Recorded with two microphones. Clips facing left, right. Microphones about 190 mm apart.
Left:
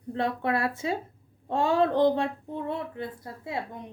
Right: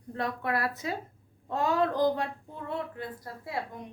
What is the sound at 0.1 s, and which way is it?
Speech, 25° left (ahead or behind).